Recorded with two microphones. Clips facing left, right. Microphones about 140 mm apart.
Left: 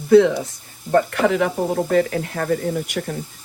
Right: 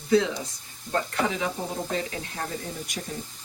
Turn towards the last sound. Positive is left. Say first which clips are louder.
# left 12 dB
turn(degrees=70)  # may be behind; listen again after turning